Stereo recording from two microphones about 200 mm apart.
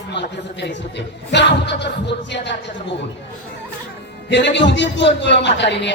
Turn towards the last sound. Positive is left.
turn(degrees=60)  # may be behind; listen again after turning